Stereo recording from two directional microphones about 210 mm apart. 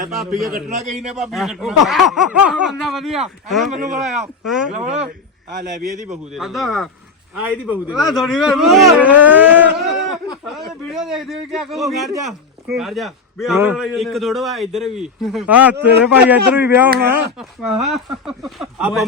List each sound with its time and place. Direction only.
0.1 s speech: centre (ahead or behind)
0.5 s a man's voice: 35° right (ahead or behind)
1.0 s speech: 5° right (ahead or behind)
4.7 s a man's voice: 35° right (ahead or behind)
6.3 s a man's voice: centre (ahead or behind)